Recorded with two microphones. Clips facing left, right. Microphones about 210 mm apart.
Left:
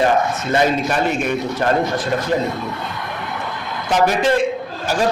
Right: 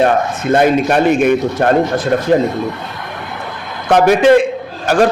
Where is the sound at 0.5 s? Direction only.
60° right (ahead or behind).